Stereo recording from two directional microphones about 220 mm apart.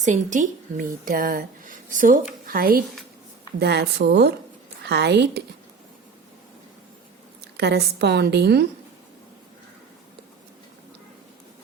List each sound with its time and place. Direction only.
0.0 s a woman's voice: 35° right (ahead or behind); by 5.4 s 50° right (ahead or behind)
7.4 s speech: 50° right (ahead or behind)